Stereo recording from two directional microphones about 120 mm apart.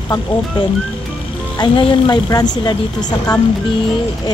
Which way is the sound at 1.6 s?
40° left (ahead or behind).